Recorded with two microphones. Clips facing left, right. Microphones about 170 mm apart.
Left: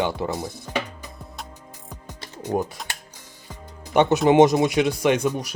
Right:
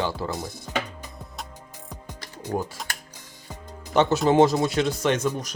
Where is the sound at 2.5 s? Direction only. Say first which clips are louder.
Left 4 dB; 20° left (ahead or behind).